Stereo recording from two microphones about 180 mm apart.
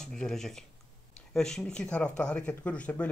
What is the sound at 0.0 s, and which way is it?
Speech, 5° left (ahead or behind).